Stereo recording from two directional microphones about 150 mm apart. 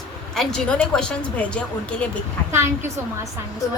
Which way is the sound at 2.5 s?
15° right (ahead or behind).